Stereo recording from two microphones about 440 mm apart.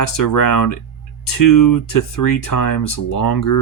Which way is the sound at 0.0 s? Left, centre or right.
Left.